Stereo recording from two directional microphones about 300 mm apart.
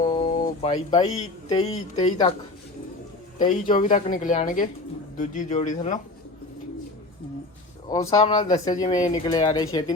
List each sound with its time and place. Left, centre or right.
0.1 s speech: left
3.3 s speech: left
7.9 s speech: centre